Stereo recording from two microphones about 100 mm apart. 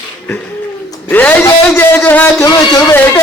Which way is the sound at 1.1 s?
15° left (ahead or behind).